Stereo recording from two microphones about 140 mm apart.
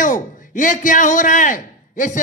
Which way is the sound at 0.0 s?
70° left (ahead or behind).